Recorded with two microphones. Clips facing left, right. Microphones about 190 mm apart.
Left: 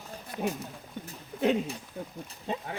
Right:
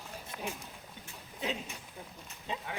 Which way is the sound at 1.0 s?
55° left (ahead or behind).